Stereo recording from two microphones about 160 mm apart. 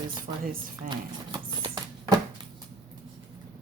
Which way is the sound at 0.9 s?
30° right (ahead or behind).